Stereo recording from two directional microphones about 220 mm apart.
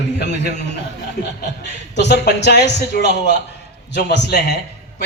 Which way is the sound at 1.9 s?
50° left (ahead or behind).